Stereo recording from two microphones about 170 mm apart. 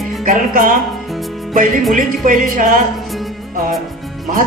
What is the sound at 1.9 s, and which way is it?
Speech, 50° right (ahead or behind).